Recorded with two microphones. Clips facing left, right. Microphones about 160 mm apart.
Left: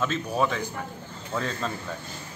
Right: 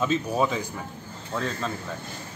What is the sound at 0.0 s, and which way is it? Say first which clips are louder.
Speech: right 2 dB; 10° right (ahead or behind).